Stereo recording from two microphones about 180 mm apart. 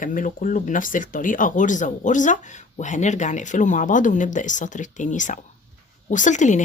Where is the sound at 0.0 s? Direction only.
45° left (ahead or behind).